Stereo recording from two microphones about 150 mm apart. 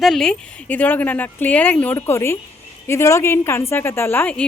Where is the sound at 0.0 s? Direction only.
Centre (ahead or behind).